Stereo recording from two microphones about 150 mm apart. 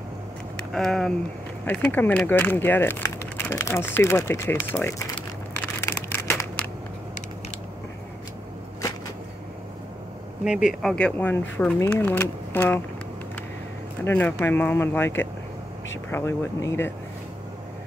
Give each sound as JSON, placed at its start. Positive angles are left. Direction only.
{"t": 0.7, "sound": "speech", "side_deg": 0}
{"t": 5.8, "sound": "crushing", "side_deg": 15}
{"t": 10.4, "sound": "speech", "side_deg": -5}
{"t": 14.0, "sound": "speech", "side_deg": 15}